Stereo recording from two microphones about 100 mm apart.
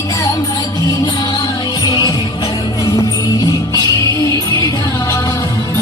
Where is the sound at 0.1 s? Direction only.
35° left (ahead or behind).